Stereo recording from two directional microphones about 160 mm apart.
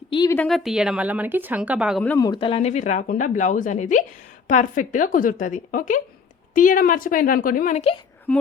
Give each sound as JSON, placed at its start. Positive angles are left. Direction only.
{"t": 0.4, "sound": "speech", "side_deg": 0}
{"t": 2.1, "sound": "a woman's voice", "side_deg": 25}
{"t": 8.3, "sound": "speech", "side_deg": 10}